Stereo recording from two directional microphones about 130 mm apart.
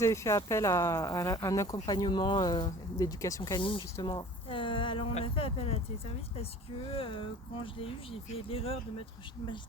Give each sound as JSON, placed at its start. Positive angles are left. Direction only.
{"t": 0.0, "sound": "speech", "side_deg": 20}
{"t": 4.0, "sound": "a sound", "side_deg": 35}
{"t": 5.1, "sound": "speech", "side_deg": 45}